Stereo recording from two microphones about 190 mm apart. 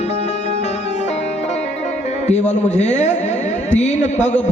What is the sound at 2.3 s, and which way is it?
A man's voice, 35° left (ahead or behind).